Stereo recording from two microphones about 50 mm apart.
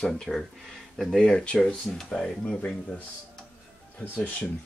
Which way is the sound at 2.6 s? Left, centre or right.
Left.